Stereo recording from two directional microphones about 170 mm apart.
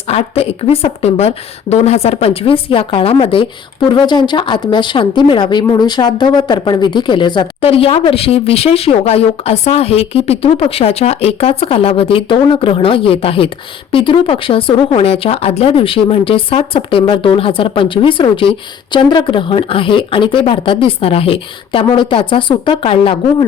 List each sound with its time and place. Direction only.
0.1 s a woman's voice: 35° left (ahead or behind)